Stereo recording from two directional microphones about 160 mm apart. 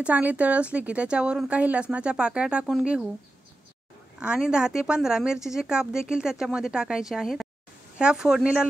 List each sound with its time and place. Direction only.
0.0 s speech: 10° right (ahead or behind)
4.2 s speech: 5° right (ahead or behind)